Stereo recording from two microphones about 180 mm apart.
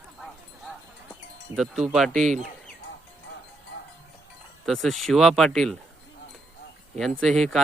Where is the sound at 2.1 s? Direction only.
40° right (ahead or behind).